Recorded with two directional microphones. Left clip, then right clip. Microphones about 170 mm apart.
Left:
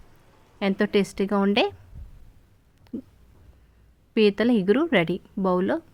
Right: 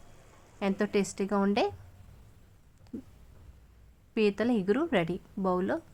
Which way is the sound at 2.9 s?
20° left (ahead or behind).